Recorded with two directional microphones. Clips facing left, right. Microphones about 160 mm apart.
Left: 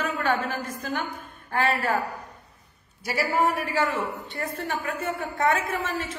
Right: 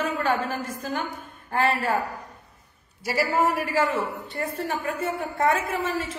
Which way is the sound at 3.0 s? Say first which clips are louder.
Right 1 dB; 5° right (ahead or behind).